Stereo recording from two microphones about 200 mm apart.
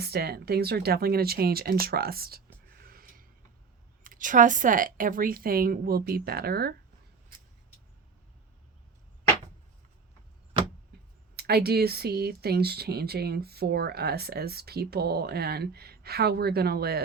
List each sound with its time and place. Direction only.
0.0 s speech: 50° right (ahead or behind)
2.6 s music: 50° right (ahead or behind)
4.0 s speech: 40° right (ahead or behind)
11.3 s speech: 50° right (ahead or behind)